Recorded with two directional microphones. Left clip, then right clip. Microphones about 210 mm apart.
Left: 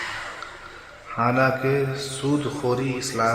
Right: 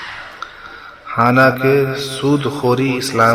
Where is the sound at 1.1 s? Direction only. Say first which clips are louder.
Right 9 dB; 30° right (ahead or behind).